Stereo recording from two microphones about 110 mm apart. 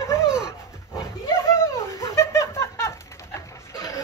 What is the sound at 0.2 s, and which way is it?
Dog, 5° right (ahead or behind).